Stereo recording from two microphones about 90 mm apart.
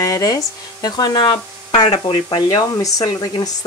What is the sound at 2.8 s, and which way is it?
Speech, 45° left (ahead or behind).